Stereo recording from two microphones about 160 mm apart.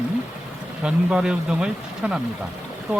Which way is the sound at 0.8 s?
5° right (ahead or behind).